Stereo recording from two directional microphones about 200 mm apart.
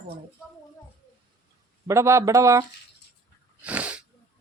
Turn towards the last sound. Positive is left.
turn(degrees=-5)  # may be behind; listen again after turning